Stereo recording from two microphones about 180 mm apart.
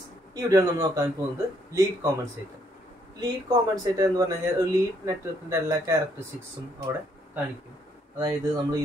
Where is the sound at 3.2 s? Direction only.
20° right (ahead or behind).